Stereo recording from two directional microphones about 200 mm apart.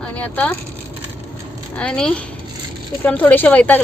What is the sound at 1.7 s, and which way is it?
Speech, 5° left (ahead or behind).